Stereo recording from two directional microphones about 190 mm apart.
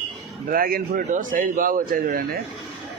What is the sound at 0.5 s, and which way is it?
Speech, 50° right (ahead or behind).